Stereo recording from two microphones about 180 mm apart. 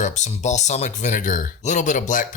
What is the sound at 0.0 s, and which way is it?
Speech, 40° left (ahead or behind).